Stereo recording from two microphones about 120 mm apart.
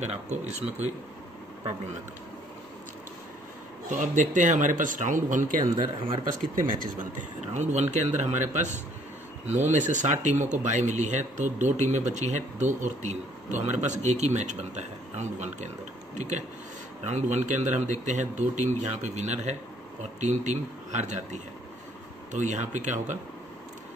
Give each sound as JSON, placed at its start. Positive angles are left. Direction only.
{"t": 0.0, "sound": "speech", "side_deg": -70}
{"t": 3.9, "sound": "speech", "side_deg": -90}
{"t": 5.9, "sound": "speech", "side_deg": -45}
{"t": 6.5, "sound": "speech", "side_deg": -90}
{"t": 17.0, "sound": "speech", "side_deg": -70}